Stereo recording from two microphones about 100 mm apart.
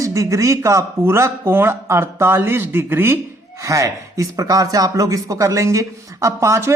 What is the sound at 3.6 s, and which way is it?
Speech, 30° right (ahead or behind).